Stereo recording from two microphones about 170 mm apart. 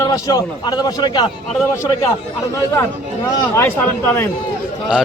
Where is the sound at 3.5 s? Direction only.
15° left (ahead or behind).